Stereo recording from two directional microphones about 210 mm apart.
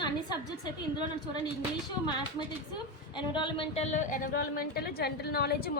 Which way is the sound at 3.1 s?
20° left (ahead or behind).